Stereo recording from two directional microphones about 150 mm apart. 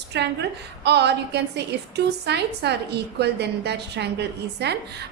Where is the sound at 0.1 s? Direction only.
90° right.